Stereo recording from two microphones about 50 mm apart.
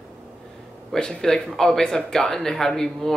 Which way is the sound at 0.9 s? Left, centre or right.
Centre.